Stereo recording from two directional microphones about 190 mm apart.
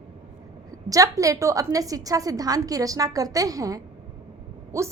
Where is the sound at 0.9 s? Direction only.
15° right (ahead or behind).